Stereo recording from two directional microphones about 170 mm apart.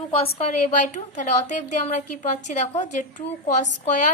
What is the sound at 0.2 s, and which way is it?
A woman's voice, 40° left (ahead or behind).